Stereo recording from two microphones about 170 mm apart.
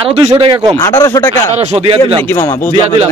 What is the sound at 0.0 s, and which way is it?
Speech, 30° right (ahead or behind).